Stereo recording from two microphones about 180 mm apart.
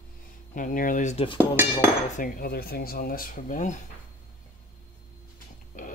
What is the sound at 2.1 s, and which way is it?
Speech, 50° left (ahead or behind).